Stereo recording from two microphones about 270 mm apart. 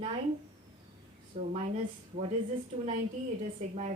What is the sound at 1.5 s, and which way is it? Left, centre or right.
Speech, right.